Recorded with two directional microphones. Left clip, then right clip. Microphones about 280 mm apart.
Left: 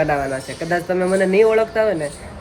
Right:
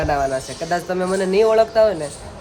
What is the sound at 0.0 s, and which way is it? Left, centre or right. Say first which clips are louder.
Speech: even; centre.